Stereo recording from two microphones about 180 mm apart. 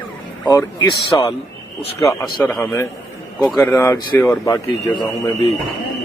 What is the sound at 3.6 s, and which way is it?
A man's voice, 15° left (ahead or behind).